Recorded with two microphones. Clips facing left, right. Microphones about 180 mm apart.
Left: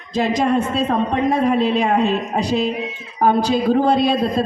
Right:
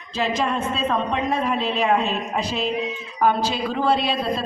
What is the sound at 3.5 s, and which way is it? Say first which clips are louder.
Speech: left 6 dB; 45° left (ahead or behind).